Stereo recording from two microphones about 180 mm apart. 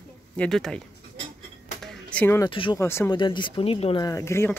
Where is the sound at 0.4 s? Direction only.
Centre (ahead or behind).